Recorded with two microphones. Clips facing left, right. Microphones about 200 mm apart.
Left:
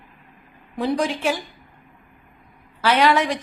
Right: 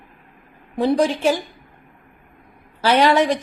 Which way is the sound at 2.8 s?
35° right (ahead or behind).